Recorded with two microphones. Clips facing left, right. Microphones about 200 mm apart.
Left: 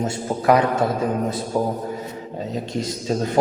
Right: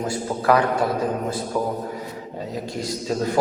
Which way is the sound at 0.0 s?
20° left (ahead or behind).